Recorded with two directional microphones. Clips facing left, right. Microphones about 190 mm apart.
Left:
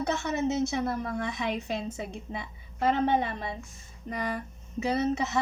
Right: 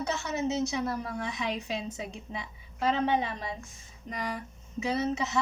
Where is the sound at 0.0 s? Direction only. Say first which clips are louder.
Left 3 dB; 50° left (ahead or behind).